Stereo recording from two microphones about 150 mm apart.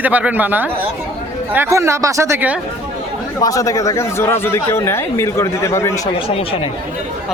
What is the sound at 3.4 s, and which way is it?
Speech, 20° left (ahead or behind).